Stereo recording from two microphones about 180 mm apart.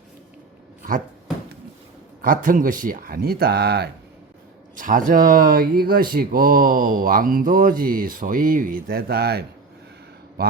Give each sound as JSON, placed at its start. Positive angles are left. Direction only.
{"t": 0.8, "sound": "speech", "side_deg": -50}
{"t": 2.2, "sound": "speech", "side_deg": -50}
{"t": 4.7, "sound": "speech", "side_deg": -45}